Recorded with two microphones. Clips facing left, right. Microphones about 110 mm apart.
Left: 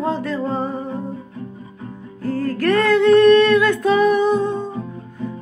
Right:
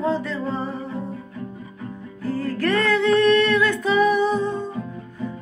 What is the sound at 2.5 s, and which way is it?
Music, 65° left (ahead or behind).